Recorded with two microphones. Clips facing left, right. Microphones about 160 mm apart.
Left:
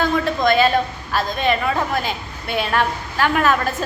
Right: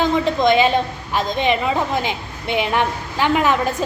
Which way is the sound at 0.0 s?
20° right (ahead or behind).